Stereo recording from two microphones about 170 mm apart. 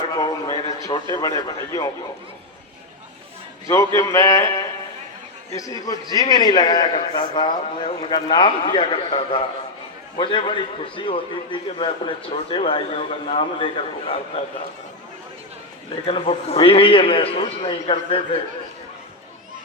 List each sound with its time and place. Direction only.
0.1 s a sound: 20° left (ahead or behind)
1.1 s a man's voice: 20° left (ahead or behind)
3.7 s a man's voice: 20° left (ahead or behind); by 14.4 s 35° left (ahead or behind)
16.0 s a man's voice: 35° left (ahead or behind)